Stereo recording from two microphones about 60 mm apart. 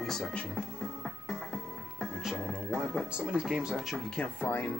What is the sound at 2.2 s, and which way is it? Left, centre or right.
Speech, centre.